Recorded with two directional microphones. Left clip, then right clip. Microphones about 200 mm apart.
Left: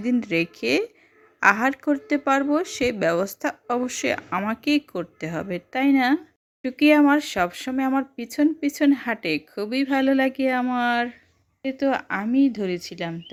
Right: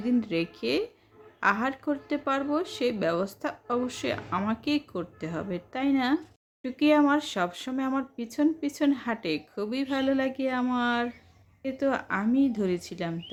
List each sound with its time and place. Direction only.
0.0 s a woman's voice: 35° left (ahead or behind)